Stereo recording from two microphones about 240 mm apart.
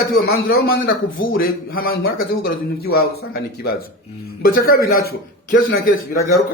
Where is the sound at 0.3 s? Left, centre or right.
Left.